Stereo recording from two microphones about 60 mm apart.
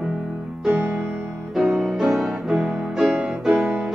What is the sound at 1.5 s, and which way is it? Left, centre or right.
Music, centre.